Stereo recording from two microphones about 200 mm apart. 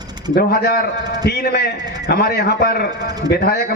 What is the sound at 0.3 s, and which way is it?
A man's voice, 50° left (ahead or behind).